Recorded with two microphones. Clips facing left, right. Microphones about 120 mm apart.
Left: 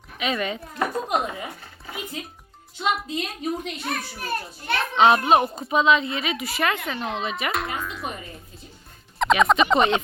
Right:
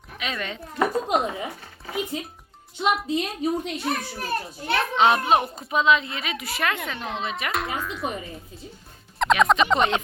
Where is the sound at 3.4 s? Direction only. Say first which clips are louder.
Right 1 dB; 30° right (ahead or behind).